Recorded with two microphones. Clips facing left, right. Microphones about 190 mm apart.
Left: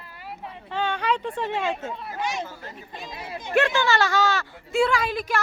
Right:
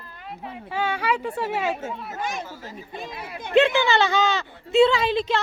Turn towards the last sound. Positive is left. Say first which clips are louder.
# right 3 dB
turn(degrees=-25)  # may be behind; listen again after turning